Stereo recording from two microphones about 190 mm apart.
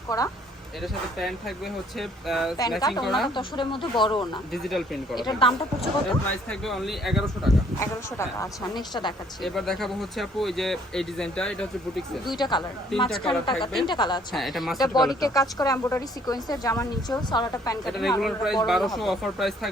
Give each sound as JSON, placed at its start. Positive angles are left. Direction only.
{"t": 0.8, "sound": "speech", "side_deg": 0}
{"t": 3.3, "sound": "a woman's voice", "side_deg": 25}
{"t": 4.5, "sound": "speech", "side_deg": 0}
{"t": 5.1, "sound": "a woman's voice", "side_deg": 25}
{"t": 5.8, "sound": "speech", "side_deg": 0}
{"t": 7.8, "sound": "a woman's voice", "side_deg": 15}
{"t": 9.4, "sound": "speech", "side_deg": 0}
{"t": 12.4, "sound": "a woman's voice", "side_deg": 25}
{"t": 12.9, "sound": "speech", "side_deg": 0}
{"t": 13.2, "sound": "a woman's voice", "side_deg": 25}
{"t": 14.3, "sound": "speech", "side_deg": 0}
{"t": 15.0, "sound": "a woman's voice", "side_deg": 20}
{"t": 17.8, "sound": "speech", "side_deg": 0}